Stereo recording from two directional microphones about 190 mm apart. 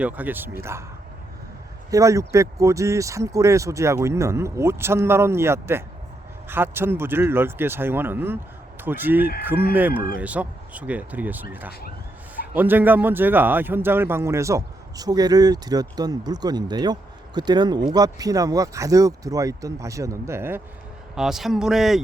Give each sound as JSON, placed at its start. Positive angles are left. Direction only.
{"t": 0.0, "sound": "speech", "side_deg": -10}
{"t": 1.9, "sound": "speech", "side_deg": -15}
{"t": 12.5, "sound": "a man's voice", "side_deg": -10}
{"t": 21.2, "sound": "speech", "side_deg": 0}